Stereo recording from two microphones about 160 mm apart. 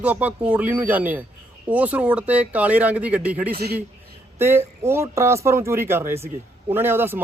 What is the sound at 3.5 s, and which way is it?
Speech, 80° right.